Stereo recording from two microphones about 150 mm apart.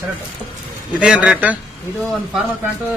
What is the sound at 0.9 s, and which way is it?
Speech, 10° right (ahead or behind).